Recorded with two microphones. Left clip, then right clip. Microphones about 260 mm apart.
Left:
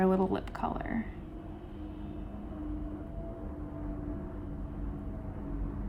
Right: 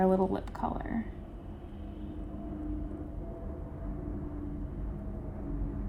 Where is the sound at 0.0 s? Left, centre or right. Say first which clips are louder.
Right 1 dB; centre.